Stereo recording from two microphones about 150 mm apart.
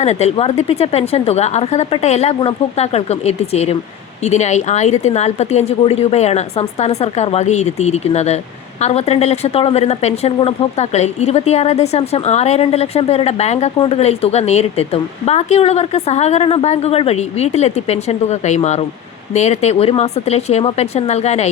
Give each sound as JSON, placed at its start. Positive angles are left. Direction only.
{"t": 0.0, "sound": "speech", "side_deg": 45}